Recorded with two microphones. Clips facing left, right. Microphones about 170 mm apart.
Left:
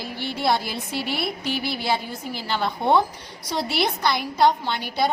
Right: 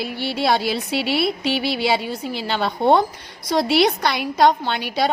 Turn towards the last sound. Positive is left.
turn(degrees=-75)  # may be behind; listen again after turning